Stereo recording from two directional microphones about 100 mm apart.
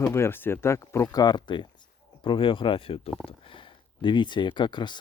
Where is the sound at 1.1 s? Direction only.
45° left (ahead or behind).